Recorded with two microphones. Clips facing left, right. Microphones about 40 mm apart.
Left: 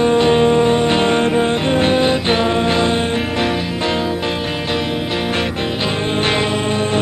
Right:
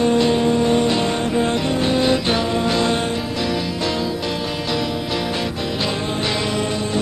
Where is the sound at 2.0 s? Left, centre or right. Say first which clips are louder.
Left 3 dB; left.